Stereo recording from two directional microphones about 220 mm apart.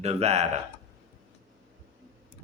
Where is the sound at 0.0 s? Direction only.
30° right (ahead or behind).